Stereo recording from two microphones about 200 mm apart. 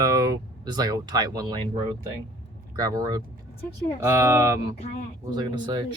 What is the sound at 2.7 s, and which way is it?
Speech, 20° right (ahead or behind).